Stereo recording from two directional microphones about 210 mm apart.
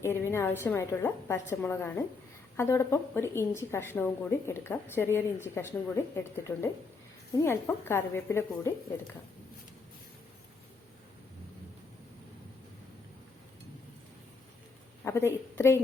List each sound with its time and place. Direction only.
0.0 s a woman's voice: 10° left (ahead or behind)
15.0 s a woman's voice: 10° left (ahead or behind)